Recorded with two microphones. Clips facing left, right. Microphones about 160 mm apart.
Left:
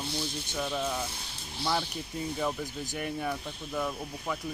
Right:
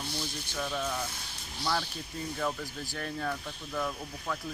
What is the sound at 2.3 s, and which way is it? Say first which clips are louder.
Speech: left 1 dB; 15° left (ahead or behind).